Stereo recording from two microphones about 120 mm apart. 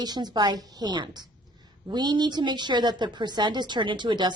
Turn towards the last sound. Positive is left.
turn(degrees=-40)  # may be behind; listen again after turning